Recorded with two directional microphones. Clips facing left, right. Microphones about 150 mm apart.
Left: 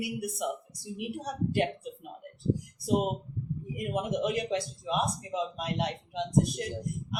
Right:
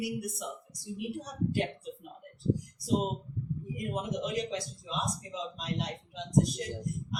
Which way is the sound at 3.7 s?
60° left (ahead or behind).